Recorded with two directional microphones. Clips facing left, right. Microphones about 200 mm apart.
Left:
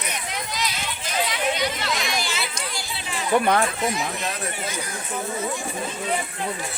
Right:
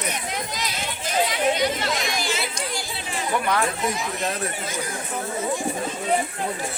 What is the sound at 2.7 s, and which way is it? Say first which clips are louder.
Chatter: right 2 dB; 45° right (ahead or behind).